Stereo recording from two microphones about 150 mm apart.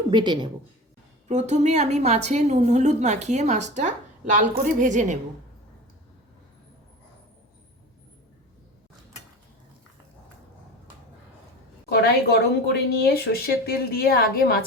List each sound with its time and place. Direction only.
0.1 s a woman's voice: 30° right (ahead or behind)
1.3 s a woman's voice: 50° right (ahead or behind)
11.9 s a woman's voice: 90° left